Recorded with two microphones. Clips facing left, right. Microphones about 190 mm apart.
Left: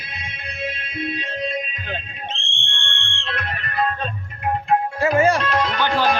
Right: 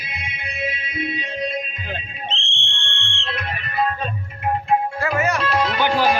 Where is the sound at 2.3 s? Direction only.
50° left (ahead or behind).